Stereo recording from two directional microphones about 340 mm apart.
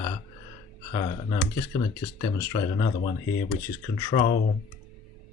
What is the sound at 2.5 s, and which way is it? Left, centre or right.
Speech, centre.